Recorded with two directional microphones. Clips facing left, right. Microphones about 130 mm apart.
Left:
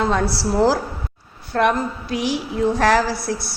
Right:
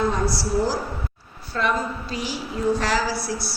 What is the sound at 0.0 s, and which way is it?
Speech, 75° left (ahead or behind).